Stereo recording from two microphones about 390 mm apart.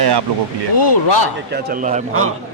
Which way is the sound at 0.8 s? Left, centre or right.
Left.